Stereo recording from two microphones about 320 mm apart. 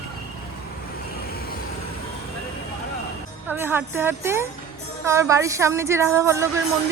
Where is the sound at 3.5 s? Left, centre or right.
Centre.